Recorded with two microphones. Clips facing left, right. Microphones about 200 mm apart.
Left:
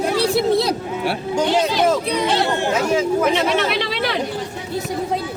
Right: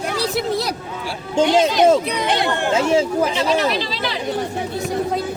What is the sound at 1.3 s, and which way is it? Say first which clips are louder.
Speech: right 4 dB; 20° right (ahead or behind).